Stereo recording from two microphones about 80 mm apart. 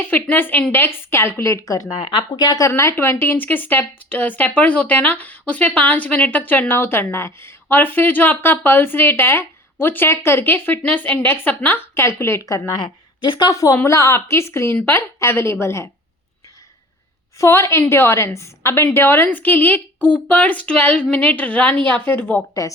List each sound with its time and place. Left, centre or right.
0.0 s a woman's voice: left
2.0 s a woman's voice: left
2.6 s speech: left
12.8 s a woman's voice: left
13.5 s a woman's voice: left
17.3 s a woman's voice: left